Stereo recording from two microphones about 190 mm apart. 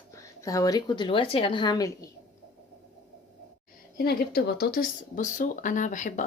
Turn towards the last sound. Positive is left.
turn(degrees=40)  # may be behind; listen again after turning